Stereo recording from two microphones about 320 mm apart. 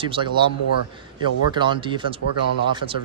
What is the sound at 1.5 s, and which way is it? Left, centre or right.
Speech, centre.